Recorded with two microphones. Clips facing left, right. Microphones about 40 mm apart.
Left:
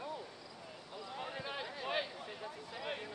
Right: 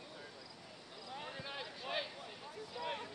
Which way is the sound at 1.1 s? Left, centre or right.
Centre.